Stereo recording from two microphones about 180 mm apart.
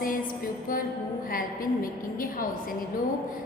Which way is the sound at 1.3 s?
50° left (ahead or behind).